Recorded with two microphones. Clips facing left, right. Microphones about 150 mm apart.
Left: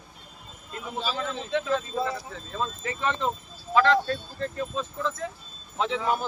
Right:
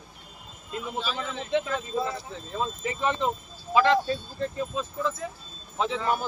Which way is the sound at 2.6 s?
15° right (ahead or behind).